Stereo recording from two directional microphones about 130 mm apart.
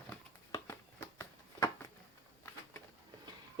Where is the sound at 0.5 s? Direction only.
20° left (ahead or behind).